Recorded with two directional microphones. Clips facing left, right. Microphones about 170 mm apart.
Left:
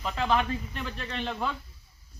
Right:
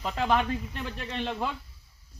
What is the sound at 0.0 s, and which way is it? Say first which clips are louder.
Speech: right 1 dB; 20° right (ahead or behind).